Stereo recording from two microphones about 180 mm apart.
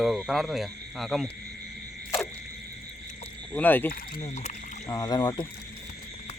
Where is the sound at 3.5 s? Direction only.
10° left (ahead or behind).